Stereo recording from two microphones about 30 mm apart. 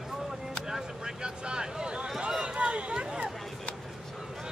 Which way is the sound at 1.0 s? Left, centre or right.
Right.